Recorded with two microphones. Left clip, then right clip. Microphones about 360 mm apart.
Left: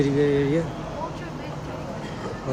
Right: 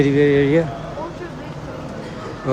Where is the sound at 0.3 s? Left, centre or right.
Right.